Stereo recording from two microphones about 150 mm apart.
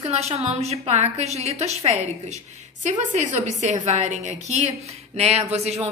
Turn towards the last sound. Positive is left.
turn(degrees=-45)  # may be behind; listen again after turning